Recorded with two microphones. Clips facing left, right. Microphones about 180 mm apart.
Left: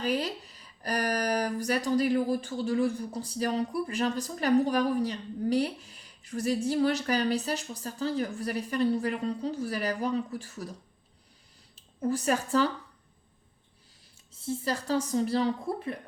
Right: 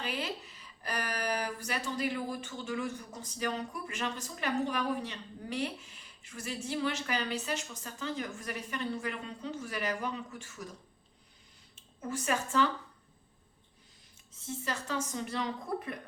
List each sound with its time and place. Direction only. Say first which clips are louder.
0.0 s speech: left 7 dB; 40° left (ahead or behind)
11.9 s speech: left 6 dB; 35° left (ahead or behind)
14.3 s speech: left 7 dB; 35° left (ahead or behind)